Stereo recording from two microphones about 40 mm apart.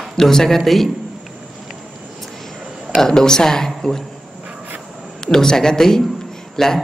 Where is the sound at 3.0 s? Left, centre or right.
Centre.